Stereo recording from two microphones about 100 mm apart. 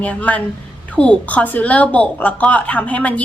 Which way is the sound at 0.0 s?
15° left (ahead or behind).